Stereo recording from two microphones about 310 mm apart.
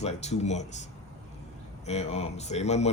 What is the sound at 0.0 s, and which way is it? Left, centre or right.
Speech, left.